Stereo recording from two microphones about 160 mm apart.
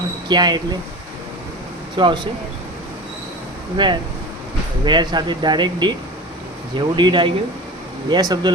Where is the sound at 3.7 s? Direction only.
30° right (ahead or behind).